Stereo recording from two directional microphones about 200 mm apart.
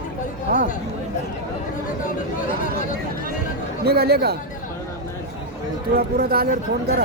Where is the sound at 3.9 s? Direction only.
50° right (ahead or behind).